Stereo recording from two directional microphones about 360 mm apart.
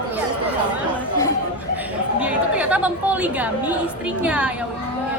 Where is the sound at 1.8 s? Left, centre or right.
Centre.